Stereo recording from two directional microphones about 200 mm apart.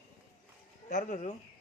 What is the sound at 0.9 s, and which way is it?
Speech, 40° left (ahead or behind).